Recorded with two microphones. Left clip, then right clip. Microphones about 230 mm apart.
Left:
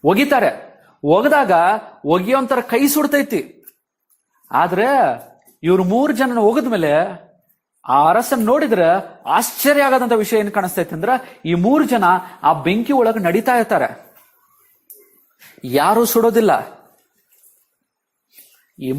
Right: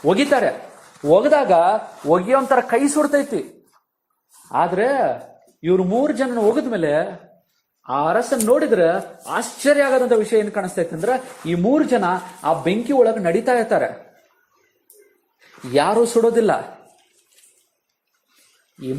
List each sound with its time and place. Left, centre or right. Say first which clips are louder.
0.0 s speech: left 2 dB; left
4.4 s speech: left 3 dB; left
15.7 s speech: left 2 dB; left